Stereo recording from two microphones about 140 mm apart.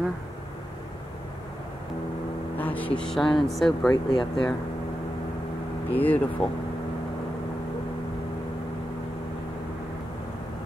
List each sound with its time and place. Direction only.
2.5 s speech: 10° left (ahead or behind)
3.9 s speech: 30° left (ahead or behind)
5.9 s speech: 10° left (ahead or behind)